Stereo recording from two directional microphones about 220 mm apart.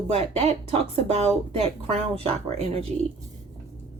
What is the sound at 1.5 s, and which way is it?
A woman's voice, 30° right (ahead or behind).